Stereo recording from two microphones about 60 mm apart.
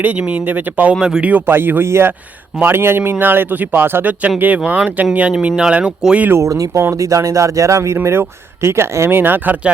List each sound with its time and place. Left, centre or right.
0.2 s speech: right
0.9 s speech: centre
1.2 s speech: right
6.4 s speech: right
8.0 s speech: right
9.0 s speech: right